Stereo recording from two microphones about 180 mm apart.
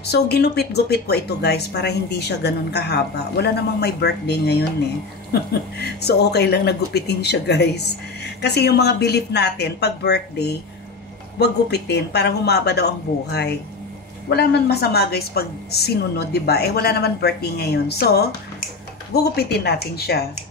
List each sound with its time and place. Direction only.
0.0 s speech: 65° left (ahead or behind)
19.3 s speech: 65° left (ahead or behind)